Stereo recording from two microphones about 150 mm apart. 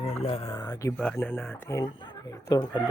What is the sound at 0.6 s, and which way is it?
Speech, 25° left (ahead or behind).